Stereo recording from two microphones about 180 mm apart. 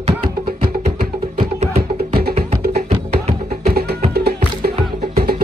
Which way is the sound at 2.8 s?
35° right (ahead or behind).